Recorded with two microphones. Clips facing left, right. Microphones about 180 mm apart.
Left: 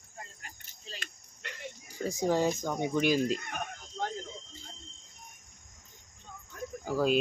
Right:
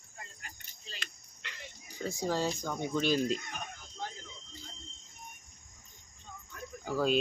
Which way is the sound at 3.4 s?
60° left (ahead or behind).